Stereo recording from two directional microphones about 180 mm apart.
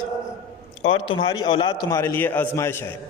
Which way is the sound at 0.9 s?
30° left (ahead or behind).